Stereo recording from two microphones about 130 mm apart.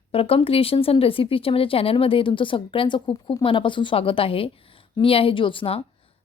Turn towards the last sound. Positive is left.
turn(degrees=45)  # may be behind; listen again after turning